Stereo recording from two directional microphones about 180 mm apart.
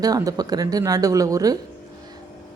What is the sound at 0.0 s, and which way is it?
Speech, 20° right (ahead or behind).